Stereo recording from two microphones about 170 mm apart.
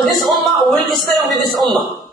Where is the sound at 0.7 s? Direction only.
Centre (ahead or behind).